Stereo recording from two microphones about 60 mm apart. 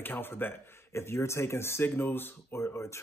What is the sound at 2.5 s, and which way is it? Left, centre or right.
Speech, left.